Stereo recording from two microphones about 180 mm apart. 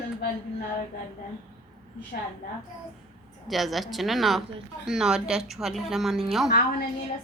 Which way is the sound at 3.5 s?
Centre (ahead or behind).